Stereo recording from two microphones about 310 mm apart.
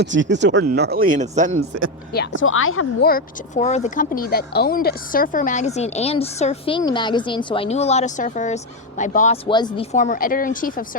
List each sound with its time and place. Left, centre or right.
0.0 s speech: right
2.1 s speech: left
3.1 s speech: left